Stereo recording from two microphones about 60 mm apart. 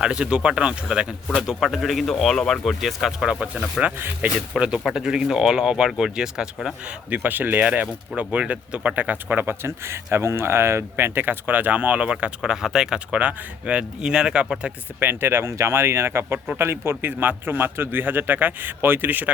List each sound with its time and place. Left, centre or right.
0.0 s speech: centre
1.6 s a man's voice: centre
3.2 s speech: right
3.9 s speech: right
4.5 s speech: centre
6.8 s speech: right
12.4 s speech: centre
13.1 s speech: right
14.9 s speech: right